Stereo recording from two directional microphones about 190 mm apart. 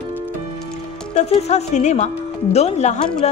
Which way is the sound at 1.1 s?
35° left (ahead or behind).